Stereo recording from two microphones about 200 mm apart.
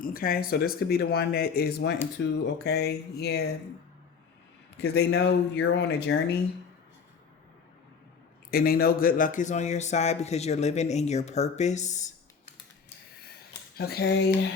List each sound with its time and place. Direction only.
0.0 s a man's voice: 45° left (ahead or behind)
4.8 s speech: 55° left (ahead or behind)
8.4 s a man's voice: 50° left (ahead or behind)
13.7 s a man's voice: 50° left (ahead or behind)